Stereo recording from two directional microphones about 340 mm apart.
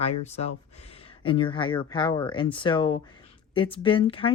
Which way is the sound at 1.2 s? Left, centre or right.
Centre.